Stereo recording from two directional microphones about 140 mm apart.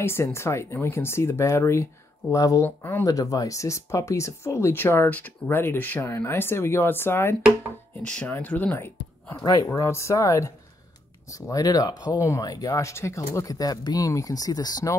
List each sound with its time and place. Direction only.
0.0 s speech: 20° left (ahead or behind)
3.1 s speech: 25° left (ahead or behind)